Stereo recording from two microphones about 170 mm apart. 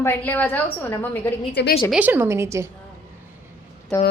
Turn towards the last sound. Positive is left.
turn(degrees=10)  # may be behind; listen again after turning